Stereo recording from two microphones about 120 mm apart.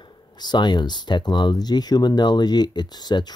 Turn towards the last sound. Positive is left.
turn(degrees=35)  # may be behind; listen again after turning